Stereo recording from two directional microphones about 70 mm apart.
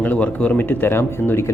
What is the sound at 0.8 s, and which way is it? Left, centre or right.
Speech, left.